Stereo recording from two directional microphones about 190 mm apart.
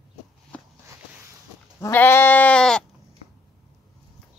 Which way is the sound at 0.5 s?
5° left (ahead or behind).